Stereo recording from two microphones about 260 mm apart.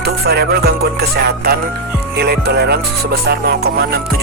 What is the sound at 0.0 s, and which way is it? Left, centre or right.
Music, right.